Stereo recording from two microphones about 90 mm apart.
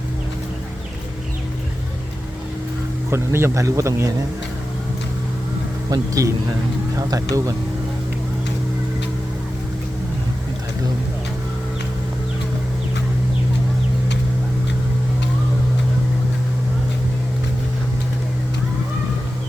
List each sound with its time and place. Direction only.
3.1 s speech: 30° right (ahead or behind)
5.9 s speech: 35° right (ahead or behind)